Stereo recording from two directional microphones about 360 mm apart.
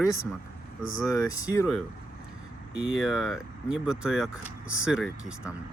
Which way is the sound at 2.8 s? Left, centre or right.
Centre.